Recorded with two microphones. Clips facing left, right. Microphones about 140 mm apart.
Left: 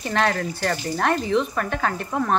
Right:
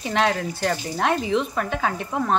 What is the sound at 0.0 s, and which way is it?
A woman's voice, 15° right (ahead or behind).